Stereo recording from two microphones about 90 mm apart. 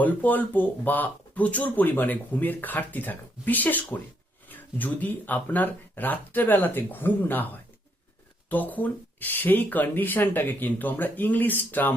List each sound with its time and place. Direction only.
0.0 s speech: 20° left (ahead or behind)